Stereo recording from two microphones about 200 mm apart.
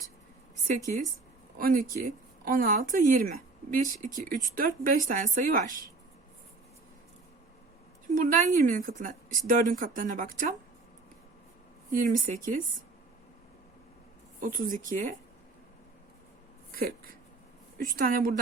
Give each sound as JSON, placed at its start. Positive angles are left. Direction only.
{"t": 1.5, "sound": "speech", "side_deg": -45}
{"t": 8.1, "sound": "a woman's voice", "side_deg": -40}
{"t": 11.9, "sound": "a woman's voice", "side_deg": -40}
{"t": 14.4, "sound": "a woman's voice", "side_deg": -40}
{"t": 16.7, "sound": "a sound", "side_deg": -50}
{"t": 17.7, "sound": "speech", "side_deg": -45}